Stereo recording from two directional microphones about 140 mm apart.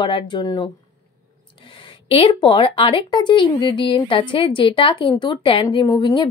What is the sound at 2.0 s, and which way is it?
Speech, 40° left (ahead or behind).